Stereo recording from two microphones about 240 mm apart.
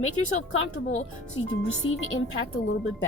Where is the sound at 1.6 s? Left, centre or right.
Left.